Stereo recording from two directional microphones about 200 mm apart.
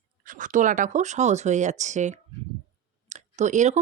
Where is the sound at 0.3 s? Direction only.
40° right (ahead or behind).